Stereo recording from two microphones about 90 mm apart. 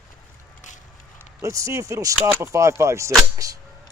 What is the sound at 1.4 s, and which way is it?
Speech, 35° right (ahead or behind).